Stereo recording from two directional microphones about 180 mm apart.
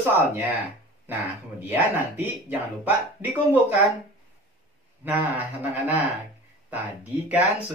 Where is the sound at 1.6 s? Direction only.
10° right (ahead or behind).